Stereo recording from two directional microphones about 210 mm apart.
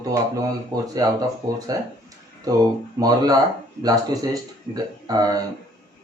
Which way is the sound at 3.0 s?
20° right (ahead or behind).